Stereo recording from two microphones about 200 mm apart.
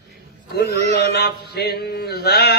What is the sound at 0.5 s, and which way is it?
Speech, 50° left (ahead or behind).